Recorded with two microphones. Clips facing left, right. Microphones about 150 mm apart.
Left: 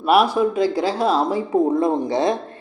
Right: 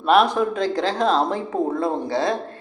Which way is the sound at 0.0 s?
10° left (ahead or behind).